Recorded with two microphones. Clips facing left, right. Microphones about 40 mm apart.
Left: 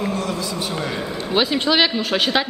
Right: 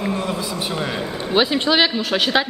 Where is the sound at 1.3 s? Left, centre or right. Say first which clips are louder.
Right 1 dB; centre.